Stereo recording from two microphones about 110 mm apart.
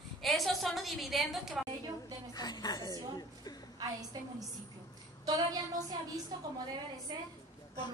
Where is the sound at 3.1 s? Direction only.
35° left (ahead or behind).